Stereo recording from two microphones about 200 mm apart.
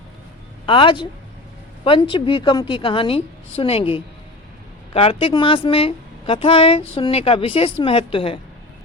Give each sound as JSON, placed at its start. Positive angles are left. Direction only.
{"t": 0.6, "sound": "a woman's voice", "side_deg": 25}